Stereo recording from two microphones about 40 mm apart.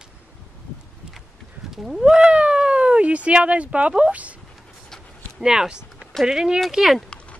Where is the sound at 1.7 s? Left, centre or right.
Centre; by 3.6 s right.